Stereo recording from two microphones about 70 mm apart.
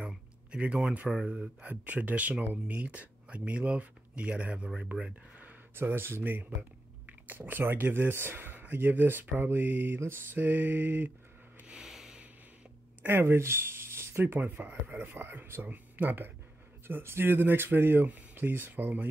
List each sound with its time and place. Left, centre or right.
0.0 s speech: centre
5.8 s speech: right
11.6 s a sound: centre
13.0 s speech: right